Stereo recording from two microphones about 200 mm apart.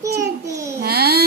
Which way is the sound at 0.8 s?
50° right (ahead or behind).